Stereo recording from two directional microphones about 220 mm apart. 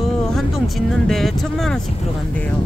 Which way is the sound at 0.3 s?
Centre (ahead or behind).